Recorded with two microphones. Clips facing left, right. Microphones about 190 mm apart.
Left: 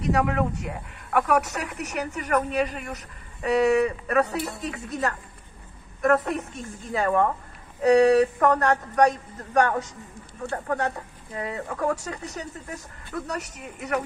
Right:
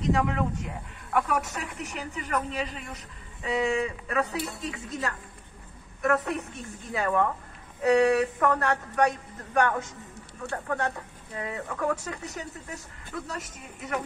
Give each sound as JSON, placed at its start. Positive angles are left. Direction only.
{"t": 0.0, "sound": "speech", "side_deg": 65}
{"t": 6.0, "sound": "speech", "side_deg": 50}
{"t": 13.3, "sound": "speech", "side_deg": 65}